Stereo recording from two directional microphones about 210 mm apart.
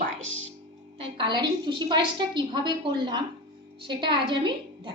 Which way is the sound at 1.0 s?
25° right (ahead or behind).